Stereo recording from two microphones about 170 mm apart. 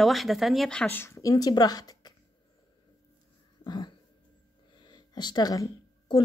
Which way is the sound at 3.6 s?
25° left (ahead or behind).